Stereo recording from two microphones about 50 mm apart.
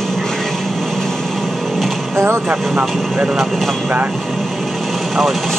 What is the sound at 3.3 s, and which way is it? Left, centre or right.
Speech, centre.